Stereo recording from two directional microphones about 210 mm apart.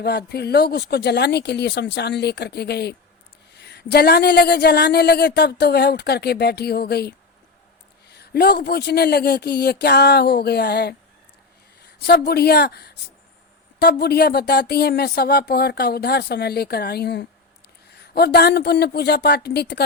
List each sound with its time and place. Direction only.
0.0 s a woman's voice: 50° left (ahead or behind)